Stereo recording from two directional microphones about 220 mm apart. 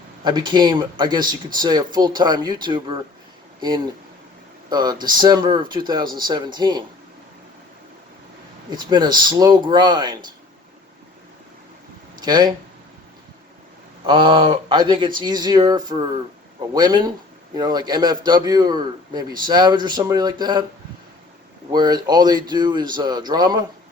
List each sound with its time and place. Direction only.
0.3 s a man's voice: 20° right (ahead or behind)
4.7 s a man's voice: 20° right (ahead or behind)
8.7 s a man's voice: 20° right (ahead or behind)
12.1 s a sound: 20° right (ahead or behind)
14.1 s a man's voice: 20° right (ahead or behind)
21.7 s a man's voice: 20° right (ahead or behind)